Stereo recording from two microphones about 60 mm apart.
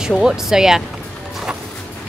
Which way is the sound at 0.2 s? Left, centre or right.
Centre.